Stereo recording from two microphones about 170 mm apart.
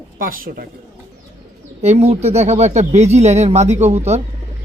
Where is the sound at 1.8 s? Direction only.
40° right (ahead or behind).